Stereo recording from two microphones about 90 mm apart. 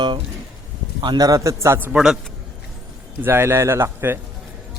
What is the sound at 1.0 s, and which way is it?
Speech, 55° right (ahead or behind).